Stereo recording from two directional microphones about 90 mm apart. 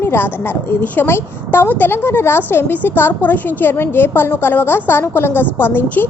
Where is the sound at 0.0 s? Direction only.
25° left (ahead or behind).